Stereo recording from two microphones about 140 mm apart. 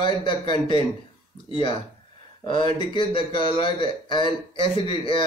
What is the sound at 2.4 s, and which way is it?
Speech, 35° left (ahead or behind).